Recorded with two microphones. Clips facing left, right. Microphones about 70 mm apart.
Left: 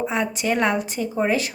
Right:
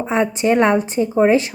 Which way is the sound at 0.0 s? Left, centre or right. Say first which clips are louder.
Right 6 dB; right.